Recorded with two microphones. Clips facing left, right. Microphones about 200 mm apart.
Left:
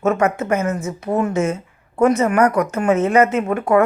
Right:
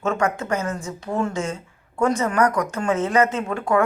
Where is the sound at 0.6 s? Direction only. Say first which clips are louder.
Left 6 dB; 20° left (ahead or behind).